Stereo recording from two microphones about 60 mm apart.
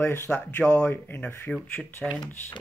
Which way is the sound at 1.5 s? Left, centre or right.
Centre.